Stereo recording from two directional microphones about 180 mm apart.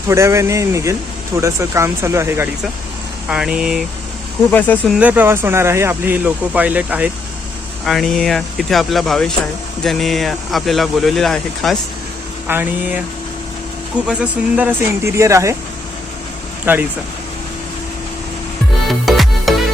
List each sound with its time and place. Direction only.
0.1 s speech: 15° right (ahead or behind)
4.5 s speech: 10° left (ahead or behind)
4.9 s speech: 10° right (ahead or behind)
7.9 s speech: centre (ahead or behind)
12.5 s speech: 10° right (ahead or behind)
14.1 s speech: 5° right (ahead or behind)
16.7 s speech: 10° right (ahead or behind)
18.9 s music: centre (ahead or behind)